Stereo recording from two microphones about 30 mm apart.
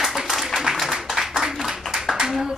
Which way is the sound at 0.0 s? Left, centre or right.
Centre.